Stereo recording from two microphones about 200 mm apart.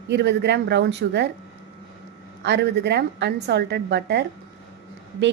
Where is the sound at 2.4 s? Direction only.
60° right (ahead or behind).